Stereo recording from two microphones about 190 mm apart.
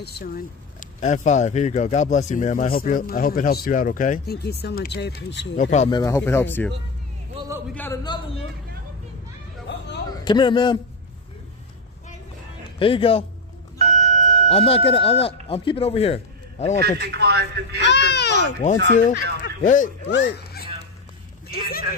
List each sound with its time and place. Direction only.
0.0 s speech: 55° left (ahead or behind)
5.6 s fowl: 35° left (ahead or behind)
5.9 s speech: 20° left (ahead or behind)
7.7 s speech: 10° left (ahead or behind)
10.2 s speech: 25° left (ahead or behind)
12.7 s speech: 25° left (ahead or behind)
13.7 s vehicle: 40° right (ahead or behind)
14.5 s speech: 30° left (ahead or behind)
16.8 s speech: 60° right (ahead or behind)
17.8 s speech: 65° left (ahead or behind)
18.9 s fowl: 40° left (ahead or behind)
19.6 s speech: 45° left (ahead or behind)
20.1 s music: 60° left (ahead or behind)
21.5 s speech: 55° left (ahead or behind)